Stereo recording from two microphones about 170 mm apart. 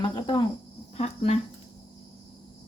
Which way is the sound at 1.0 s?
35° left (ahead or behind).